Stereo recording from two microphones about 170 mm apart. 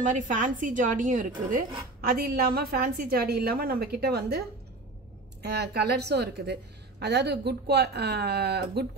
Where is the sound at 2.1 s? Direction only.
65° right (ahead or behind).